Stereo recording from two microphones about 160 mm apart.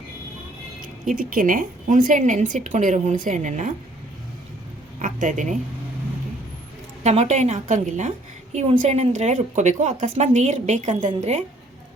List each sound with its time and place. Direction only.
1.0 s a woman's voice: 55° right (ahead or behind)
4.9 s speech: 50° right (ahead or behind)
7.0 s a woman's voice: 45° right (ahead or behind)